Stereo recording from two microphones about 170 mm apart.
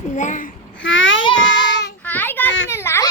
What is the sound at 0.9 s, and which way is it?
Child singing, 90° left.